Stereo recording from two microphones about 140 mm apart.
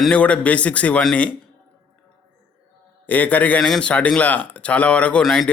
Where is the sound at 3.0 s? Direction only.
10° left (ahead or behind).